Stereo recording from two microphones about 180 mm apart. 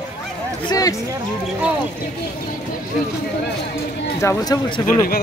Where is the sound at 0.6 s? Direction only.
20° left (ahead or behind).